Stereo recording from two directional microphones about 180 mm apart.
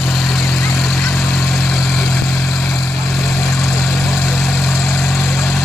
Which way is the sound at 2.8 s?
20° left (ahead or behind).